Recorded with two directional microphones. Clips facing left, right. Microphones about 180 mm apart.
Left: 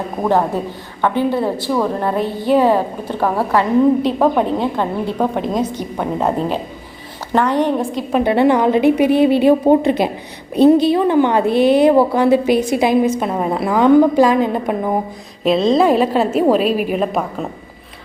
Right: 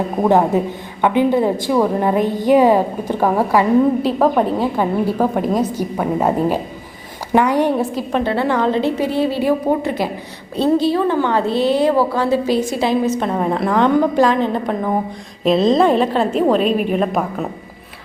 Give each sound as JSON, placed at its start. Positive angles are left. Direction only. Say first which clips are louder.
{"t": 0.2, "sound": "a woman's voice", "louder": "right 2 dB", "side_deg": -15}
{"t": 8.2, "sound": "a woman's voice", "louder": "left 5 dB", "side_deg": 15}